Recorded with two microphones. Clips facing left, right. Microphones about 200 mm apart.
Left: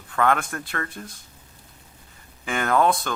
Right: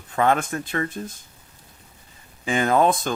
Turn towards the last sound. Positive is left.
turn(degrees=-20)  # may be behind; listen again after turning